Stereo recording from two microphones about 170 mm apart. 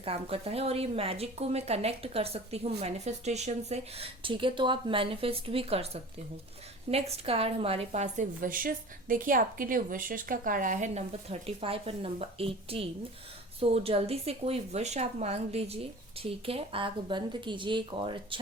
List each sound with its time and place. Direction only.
0.0 s a woman's voice: 35° right (ahead or behind)